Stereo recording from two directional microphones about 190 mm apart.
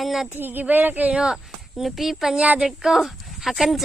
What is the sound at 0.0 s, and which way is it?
Speech, centre (ahead or behind).